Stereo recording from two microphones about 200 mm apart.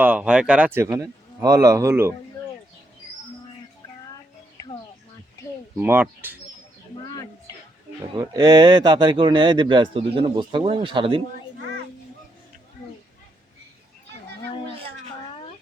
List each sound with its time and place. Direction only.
0.0 s speech: 5° right (ahead or behind)
5.7 s speech: 10° right (ahead or behind)
7.1 s a sound: 20° left (ahead or behind)
8.1 s speech: 20° right (ahead or behind)